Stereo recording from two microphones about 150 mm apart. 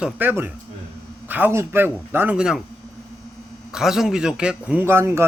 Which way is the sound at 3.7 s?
5° right (ahead or behind).